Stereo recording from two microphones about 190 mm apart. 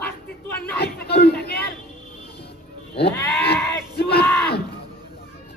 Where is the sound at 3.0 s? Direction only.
60° left (ahead or behind).